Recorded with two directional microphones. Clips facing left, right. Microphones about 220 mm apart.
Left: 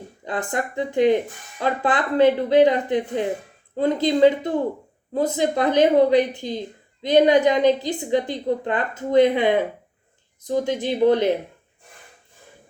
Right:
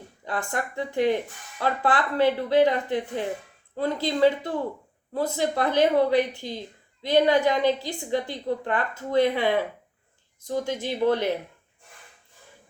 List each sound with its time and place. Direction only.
0.5 s speech: 20° left (ahead or behind)